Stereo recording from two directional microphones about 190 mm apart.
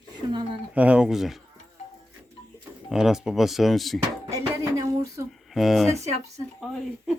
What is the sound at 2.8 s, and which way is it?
Speech, centre (ahead or behind).